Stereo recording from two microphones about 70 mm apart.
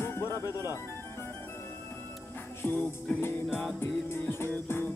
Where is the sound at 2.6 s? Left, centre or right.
Left.